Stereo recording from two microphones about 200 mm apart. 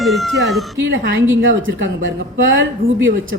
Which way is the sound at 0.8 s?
65° right (ahead or behind).